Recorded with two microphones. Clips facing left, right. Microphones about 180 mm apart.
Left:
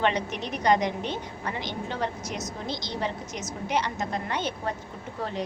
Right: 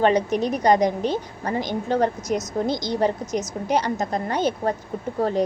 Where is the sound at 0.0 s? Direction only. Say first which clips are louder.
Right 8 dB; 40° right (ahead or behind).